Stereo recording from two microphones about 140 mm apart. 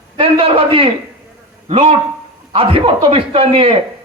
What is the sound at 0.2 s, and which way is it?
A man's voice, 40° right (ahead or behind).